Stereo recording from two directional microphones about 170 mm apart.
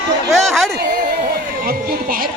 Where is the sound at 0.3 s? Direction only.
Centre (ahead or behind).